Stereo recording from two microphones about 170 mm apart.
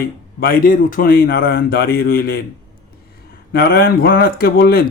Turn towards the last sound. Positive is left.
turn(degrees=60)  # may be behind; listen again after turning